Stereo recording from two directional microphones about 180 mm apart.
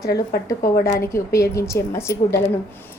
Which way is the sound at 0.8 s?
55° left (ahead or behind).